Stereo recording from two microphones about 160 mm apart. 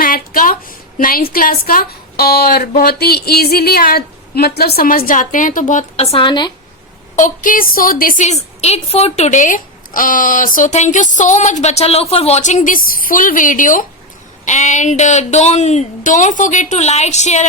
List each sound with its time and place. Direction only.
0.0 s a woman's voice: 60° left (ahead or behind); by 6.5 s 30° left (ahead or behind)
7.2 s a woman's voice: 55° left (ahead or behind)